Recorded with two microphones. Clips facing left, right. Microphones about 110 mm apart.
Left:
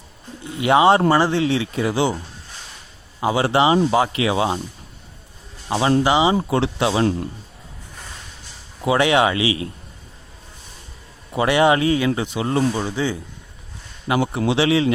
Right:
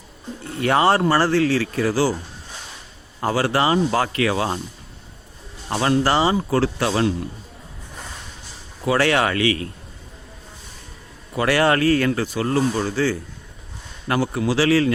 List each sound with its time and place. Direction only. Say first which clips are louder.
0.6 s speech: left 3 dB; 15° left (ahead or behind)
3.3 s speech: left 2 dB; 25° left (ahead or behind)
5.6 s speech: left 2 dB; 10° left (ahead or behind)
8.8 s speech: left 2 dB; 20° left (ahead or behind)
11.3 s speech: left 2 dB; 20° left (ahead or behind)
14.2 s speech: left 1 dB; 25° left (ahead or behind)